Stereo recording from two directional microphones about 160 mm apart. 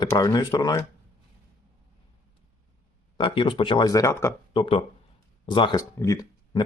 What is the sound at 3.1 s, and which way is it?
Speech, 30° left (ahead or behind).